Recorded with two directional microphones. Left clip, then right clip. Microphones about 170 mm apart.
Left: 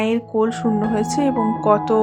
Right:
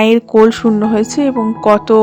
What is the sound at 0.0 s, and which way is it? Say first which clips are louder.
Speech: right 11 dB; 40° right (ahead or behind).